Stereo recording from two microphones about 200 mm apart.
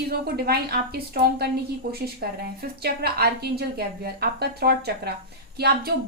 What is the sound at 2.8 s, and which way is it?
Speech, 50° right (ahead or behind).